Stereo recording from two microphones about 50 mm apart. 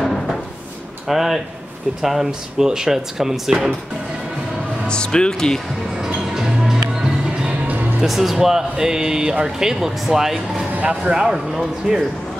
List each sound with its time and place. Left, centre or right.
0.0 s a sound: centre
1.0 s speech: centre
4.8 s speech: centre
6.6 s music: centre
7.4 s music: right
8.0 s speech: centre